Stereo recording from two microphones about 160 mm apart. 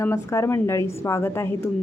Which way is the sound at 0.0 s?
20° left (ahead or behind).